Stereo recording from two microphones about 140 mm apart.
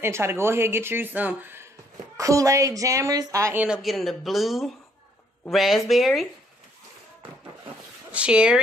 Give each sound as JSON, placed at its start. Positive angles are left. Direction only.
{"t": 0.0, "sound": "speech", "side_deg": -15}
{"t": 3.6, "sound": "speech", "side_deg": -5}
{"t": 8.1, "sound": "speech", "side_deg": -10}